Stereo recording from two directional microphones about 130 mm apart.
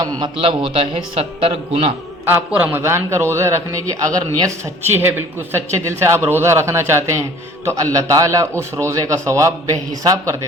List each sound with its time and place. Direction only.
0.2 s a man's voice: 45° right (ahead or behind)
2.2 s a man's voice: 15° right (ahead or behind)